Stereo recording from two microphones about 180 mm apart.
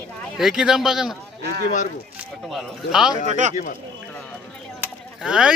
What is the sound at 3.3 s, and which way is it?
Speech, 40° right (ahead or behind).